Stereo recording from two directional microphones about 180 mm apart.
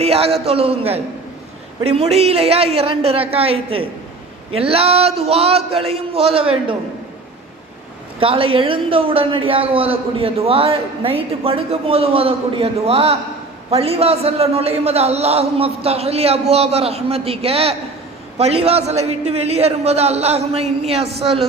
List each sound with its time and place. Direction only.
0.0 s a man's voice: 35° right (ahead or behind)
8.2 s a man's voice: 30° right (ahead or behind)